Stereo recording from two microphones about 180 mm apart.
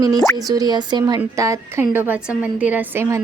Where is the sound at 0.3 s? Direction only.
20° right (ahead or behind).